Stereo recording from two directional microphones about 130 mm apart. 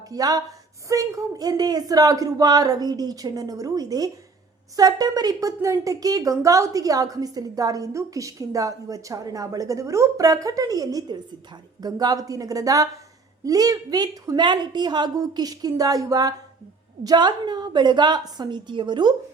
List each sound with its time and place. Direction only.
0.1 s a woman's voice: 30° right (ahead or behind)